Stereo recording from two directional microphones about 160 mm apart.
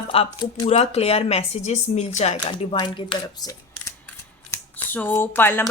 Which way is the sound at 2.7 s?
30° left (ahead or behind).